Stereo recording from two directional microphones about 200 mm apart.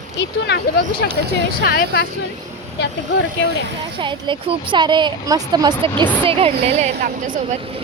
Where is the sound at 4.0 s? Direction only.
25° right (ahead or behind); by 7.6 s 40° right (ahead or behind).